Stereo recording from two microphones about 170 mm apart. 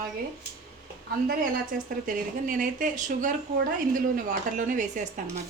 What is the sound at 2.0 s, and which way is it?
A woman's voice, 55° right (ahead or behind).